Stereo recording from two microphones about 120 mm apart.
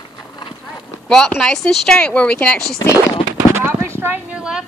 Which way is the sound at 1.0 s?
5° left (ahead or behind).